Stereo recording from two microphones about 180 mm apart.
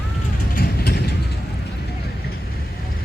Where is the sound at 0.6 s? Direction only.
60° left (ahead or behind).